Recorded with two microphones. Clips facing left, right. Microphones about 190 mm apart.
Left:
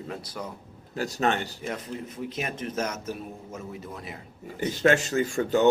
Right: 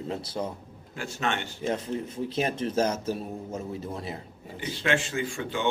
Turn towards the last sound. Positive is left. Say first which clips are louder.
# left 7 dB
turn(degrees=40)  # may be behind; listen again after turning